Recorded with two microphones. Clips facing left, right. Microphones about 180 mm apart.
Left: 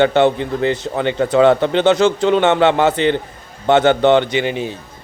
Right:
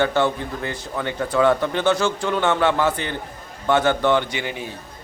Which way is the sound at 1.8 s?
20° left (ahead or behind).